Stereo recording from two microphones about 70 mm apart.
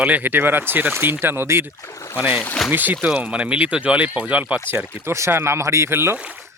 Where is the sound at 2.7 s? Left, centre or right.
Right.